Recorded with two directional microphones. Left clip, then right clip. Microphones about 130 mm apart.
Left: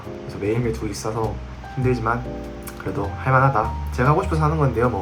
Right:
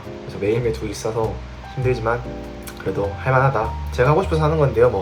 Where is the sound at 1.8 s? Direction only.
15° left (ahead or behind).